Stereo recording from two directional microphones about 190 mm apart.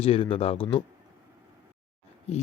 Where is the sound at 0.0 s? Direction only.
30° left (ahead or behind).